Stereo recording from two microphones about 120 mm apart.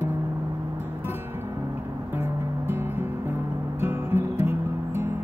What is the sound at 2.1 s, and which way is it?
Music, 15° right (ahead or behind).